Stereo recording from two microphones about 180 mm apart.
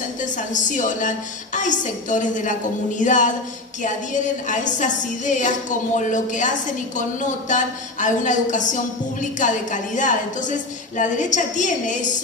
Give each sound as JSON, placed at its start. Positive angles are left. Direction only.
{"t": 0.2, "sound": "speech", "side_deg": 45}